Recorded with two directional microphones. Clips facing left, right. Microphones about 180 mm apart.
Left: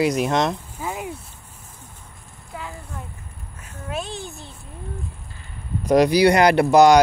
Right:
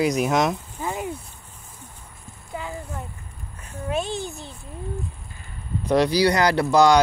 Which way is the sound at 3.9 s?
Centre (ahead or behind).